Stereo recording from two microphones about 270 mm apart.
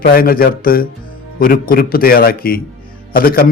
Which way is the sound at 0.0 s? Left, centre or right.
Left.